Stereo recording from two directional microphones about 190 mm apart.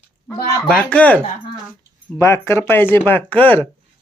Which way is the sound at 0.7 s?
5° left (ahead or behind).